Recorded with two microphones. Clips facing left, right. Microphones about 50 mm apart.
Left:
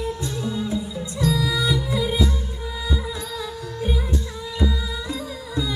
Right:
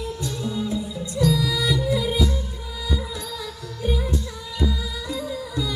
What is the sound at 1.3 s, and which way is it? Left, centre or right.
Music, centre.